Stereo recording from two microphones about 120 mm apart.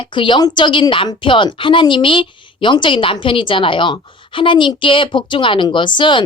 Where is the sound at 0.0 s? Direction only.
40° left (ahead or behind).